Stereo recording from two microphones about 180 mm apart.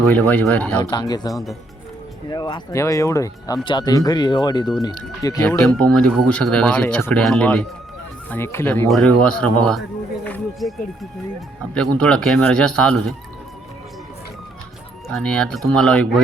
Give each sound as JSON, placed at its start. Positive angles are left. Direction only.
{"t": 0.1, "sound": "speech", "side_deg": 10}
{"t": 0.8, "sound": "speech", "side_deg": 25}
{"t": 1.3, "sound": "speech", "side_deg": 0}
{"t": 2.3, "sound": "speech", "side_deg": 25}
{"t": 5.5, "sound": "speech", "side_deg": 5}
{"t": 10.2, "sound": "music", "side_deg": 5}
{"t": 11.3, "sound": "speech", "side_deg": 5}
{"t": 15.1, "sound": "speech", "side_deg": 5}